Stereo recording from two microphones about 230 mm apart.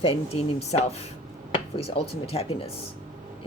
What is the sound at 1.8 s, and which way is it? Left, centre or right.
Speech, left.